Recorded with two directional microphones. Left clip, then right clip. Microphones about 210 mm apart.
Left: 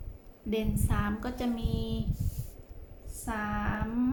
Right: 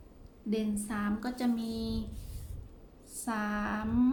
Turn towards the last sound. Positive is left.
turn(degrees=-15)  # may be behind; listen again after turning